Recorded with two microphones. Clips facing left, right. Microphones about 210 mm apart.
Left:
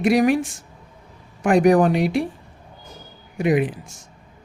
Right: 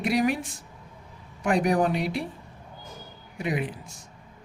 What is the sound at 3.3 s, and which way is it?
Speech, 90° left.